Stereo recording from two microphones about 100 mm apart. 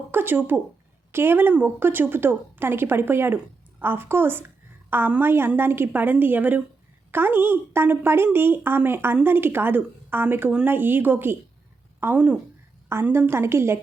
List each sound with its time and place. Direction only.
0.1 s a woman's voice: 20° right (ahead or behind)